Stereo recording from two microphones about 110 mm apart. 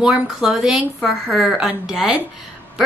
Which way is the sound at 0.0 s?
5° right (ahead or behind).